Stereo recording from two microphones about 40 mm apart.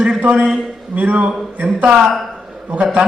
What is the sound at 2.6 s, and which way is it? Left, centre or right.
Speech, right.